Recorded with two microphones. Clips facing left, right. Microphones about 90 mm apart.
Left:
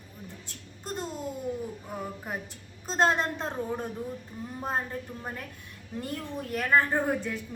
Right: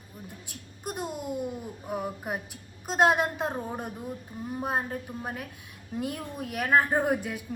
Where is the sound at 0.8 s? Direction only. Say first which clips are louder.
Right 1 dB; 10° right (ahead or behind).